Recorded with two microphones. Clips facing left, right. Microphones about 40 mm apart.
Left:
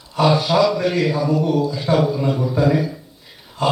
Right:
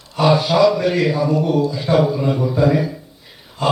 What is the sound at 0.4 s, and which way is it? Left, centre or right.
A man's voice, centre.